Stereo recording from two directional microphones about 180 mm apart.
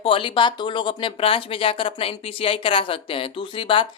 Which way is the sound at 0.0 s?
30° left (ahead or behind).